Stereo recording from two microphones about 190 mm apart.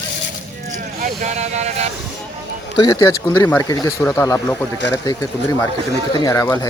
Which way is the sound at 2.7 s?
20° left (ahead or behind).